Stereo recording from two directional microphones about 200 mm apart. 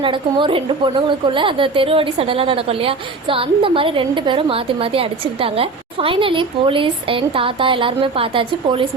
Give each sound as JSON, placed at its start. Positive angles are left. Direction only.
{"t": 0.0, "sound": "a woman's voice", "side_deg": -25}